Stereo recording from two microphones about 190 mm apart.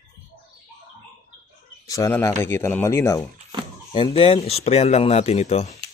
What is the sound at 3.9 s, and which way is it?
Speech, 30° left (ahead or behind).